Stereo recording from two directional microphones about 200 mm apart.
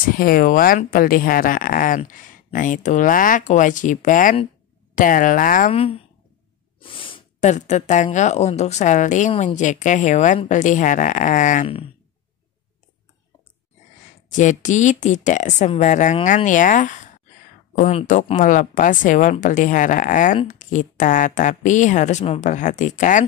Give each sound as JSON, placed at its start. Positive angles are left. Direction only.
{"t": 0.1, "sound": "speech", "side_deg": 45}
{"t": 14.3, "sound": "speech", "side_deg": 40}